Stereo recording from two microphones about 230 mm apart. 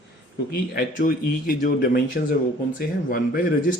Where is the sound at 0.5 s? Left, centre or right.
Left.